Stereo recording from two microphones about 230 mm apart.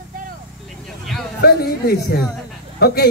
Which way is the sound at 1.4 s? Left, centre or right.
Left.